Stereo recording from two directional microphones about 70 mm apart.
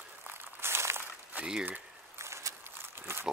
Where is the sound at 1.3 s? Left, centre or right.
Centre.